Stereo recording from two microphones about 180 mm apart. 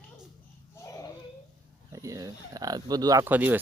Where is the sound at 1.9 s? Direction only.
20° right (ahead or behind).